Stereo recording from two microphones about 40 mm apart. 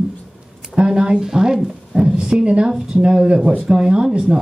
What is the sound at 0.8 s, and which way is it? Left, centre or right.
A woman's voice, centre.